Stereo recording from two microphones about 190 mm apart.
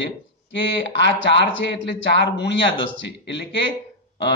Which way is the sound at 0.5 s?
70° left (ahead or behind).